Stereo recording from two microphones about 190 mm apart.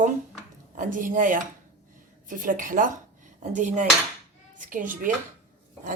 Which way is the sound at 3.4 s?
40° right (ahead or behind).